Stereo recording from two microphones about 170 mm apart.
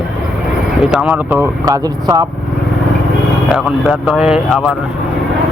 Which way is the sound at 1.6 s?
20° right (ahead or behind).